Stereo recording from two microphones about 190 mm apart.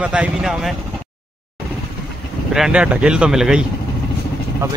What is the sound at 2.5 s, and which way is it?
A man's voice, 5° right (ahead or behind).